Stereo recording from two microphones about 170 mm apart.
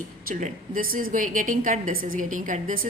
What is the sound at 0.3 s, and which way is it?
A woman's voice, 50° right (ahead or behind).